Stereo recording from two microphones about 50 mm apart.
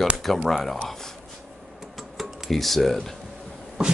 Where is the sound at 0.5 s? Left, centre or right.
Centre.